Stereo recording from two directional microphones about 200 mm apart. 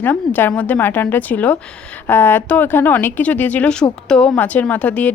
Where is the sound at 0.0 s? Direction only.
10° left (ahead or behind).